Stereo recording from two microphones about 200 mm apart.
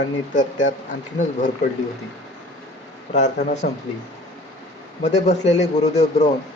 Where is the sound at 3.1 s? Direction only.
35° left (ahead or behind).